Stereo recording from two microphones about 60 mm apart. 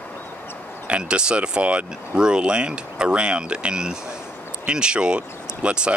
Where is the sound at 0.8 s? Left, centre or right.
Centre.